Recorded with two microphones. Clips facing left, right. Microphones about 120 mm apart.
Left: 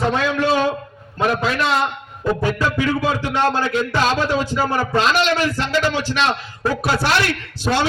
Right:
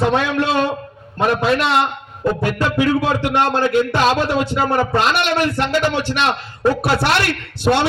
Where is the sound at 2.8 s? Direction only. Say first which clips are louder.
Right 3 dB; 70° right (ahead or behind).